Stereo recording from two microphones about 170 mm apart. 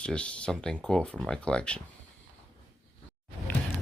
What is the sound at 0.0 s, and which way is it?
Speech, 5° left (ahead or behind).